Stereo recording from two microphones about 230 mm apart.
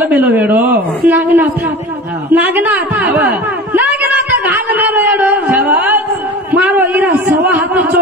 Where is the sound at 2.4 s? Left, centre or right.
Centre.